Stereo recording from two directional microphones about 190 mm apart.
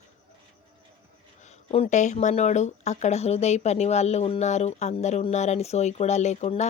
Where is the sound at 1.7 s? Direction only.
35° left (ahead or behind).